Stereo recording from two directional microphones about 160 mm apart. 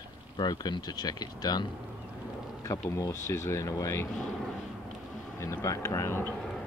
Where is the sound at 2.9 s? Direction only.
20° left (ahead or behind).